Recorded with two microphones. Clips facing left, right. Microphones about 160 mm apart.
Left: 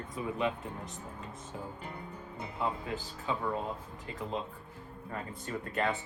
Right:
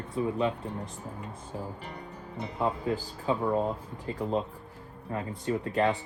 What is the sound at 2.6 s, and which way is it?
Speech, 35° right (ahead or behind).